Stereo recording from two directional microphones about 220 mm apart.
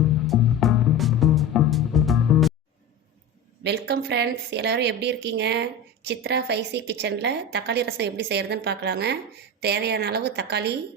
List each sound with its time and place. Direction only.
0.3 s music: centre (ahead or behind)
3.6 s speech: 50° right (ahead or behind)